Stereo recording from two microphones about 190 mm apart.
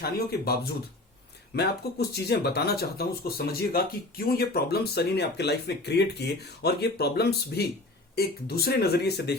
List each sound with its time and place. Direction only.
0.0 s speech: 55° left (ahead or behind)